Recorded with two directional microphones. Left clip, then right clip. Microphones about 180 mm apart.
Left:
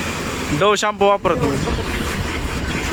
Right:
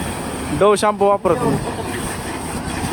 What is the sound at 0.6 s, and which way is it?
Speech, centre (ahead or behind).